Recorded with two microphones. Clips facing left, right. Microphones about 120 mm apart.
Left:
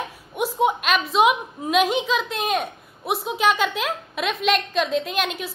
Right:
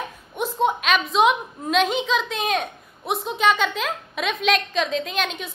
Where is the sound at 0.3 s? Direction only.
10° left (ahead or behind).